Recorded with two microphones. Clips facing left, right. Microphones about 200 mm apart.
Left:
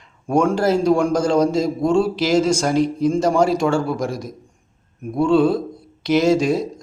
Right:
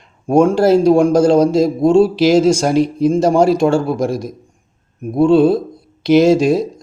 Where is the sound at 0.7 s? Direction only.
30° right (ahead or behind).